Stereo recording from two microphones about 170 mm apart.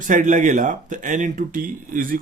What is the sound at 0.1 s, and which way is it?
Speech, 45° right (ahead or behind).